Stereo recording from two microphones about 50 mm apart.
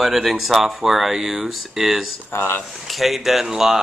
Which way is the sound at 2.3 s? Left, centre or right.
Left.